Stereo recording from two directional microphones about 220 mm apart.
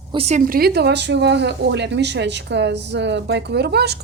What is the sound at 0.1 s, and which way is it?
Speech, 30° right (ahead or behind).